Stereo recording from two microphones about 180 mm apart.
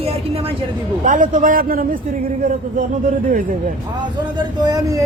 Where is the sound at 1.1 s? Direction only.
45° right (ahead or behind).